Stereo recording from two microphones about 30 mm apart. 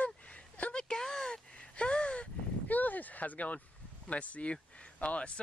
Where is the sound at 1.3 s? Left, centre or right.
Left.